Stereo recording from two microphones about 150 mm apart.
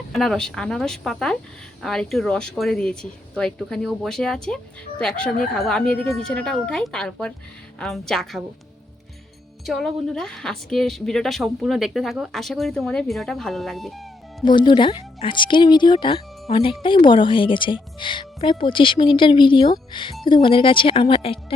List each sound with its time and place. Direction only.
0.1 s speech: 5° left (ahead or behind)
9.6 s speech: centre (ahead or behind)
14.4 s speech: 30° left (ahead or behind)